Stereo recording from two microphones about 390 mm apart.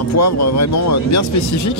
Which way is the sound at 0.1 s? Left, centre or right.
Left.